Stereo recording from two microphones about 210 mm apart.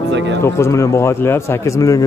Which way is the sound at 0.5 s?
15° left (ahead or behind).